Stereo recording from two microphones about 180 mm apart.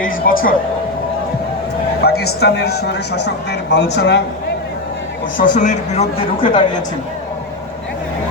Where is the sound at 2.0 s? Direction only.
60° left (ahead or behind).